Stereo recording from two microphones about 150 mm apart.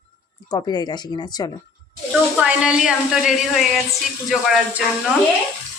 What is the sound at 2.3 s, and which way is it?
Speech, 5° right (ahead or behind).